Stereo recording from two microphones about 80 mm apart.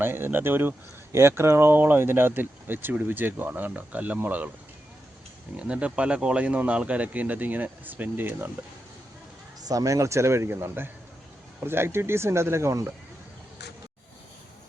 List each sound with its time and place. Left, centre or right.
0.0 s speech: right
5.5 s speech: centre
9.6 s speech: right